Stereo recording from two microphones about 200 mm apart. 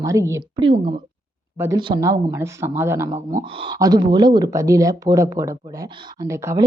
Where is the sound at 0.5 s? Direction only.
25° right (ahead or behind).